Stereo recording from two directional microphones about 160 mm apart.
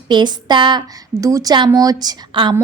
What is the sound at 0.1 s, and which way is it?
A woman's voice, 25° right (ahead or behind).